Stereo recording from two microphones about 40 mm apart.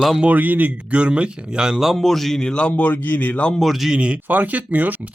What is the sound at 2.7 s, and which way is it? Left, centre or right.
Speech, left.